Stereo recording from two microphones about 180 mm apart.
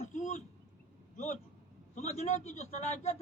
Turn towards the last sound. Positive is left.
turn(degrees=40)  # may be behind; listen again after turning